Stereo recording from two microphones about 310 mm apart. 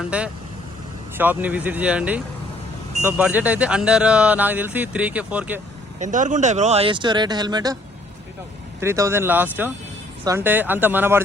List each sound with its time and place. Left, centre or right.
0.0 s speech: centre
6.0 s speech: right
8.8 s speech: centre